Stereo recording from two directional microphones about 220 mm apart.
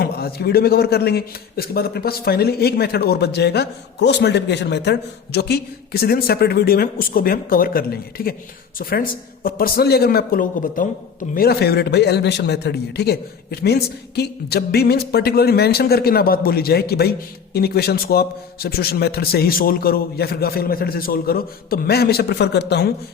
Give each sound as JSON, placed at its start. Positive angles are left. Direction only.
{"t": 0.0, "sound": "a man's voice", "side_deg": 45}